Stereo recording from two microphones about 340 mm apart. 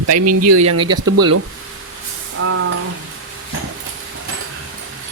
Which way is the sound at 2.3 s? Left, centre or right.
Right.